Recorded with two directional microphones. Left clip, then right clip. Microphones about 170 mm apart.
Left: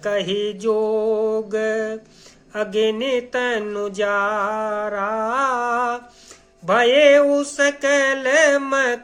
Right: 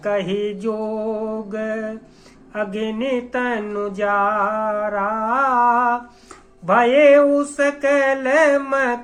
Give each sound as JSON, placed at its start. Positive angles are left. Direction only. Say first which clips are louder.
{"t": 0.0, "sound": "music", "louder": "even", "side_deg": 40}